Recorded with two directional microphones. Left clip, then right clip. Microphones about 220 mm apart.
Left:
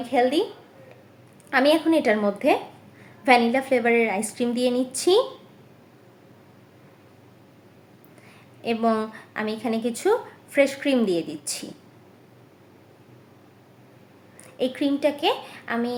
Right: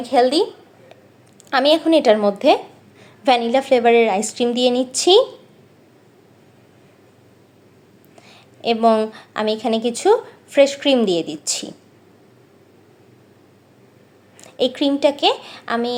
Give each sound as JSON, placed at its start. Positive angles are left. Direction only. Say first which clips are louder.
{"t": 0.0, "sound": "a woman's voice", "louder": "right 6 dB", "side_deg": -15}
{"t": 1.5, "sound": "a woman's voice", "louder": "right 4 dB", "side_deg": -15}
{"t": 8.3, "sound": "a woman's voice", "louder": "right 7 dB", "side_deg": -10}
{"t": 14.4, "sound": "a woman's voice", "louder": "right 6 dB", "side_deg": -15}